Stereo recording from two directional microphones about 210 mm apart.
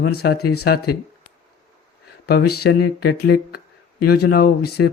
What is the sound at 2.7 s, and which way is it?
Speech, 75° left (ahead or behind).